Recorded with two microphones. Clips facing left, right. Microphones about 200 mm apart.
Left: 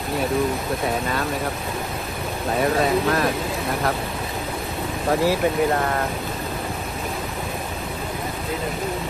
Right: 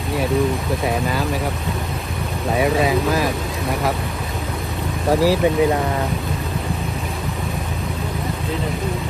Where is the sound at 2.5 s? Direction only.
Centre (ahead or behind).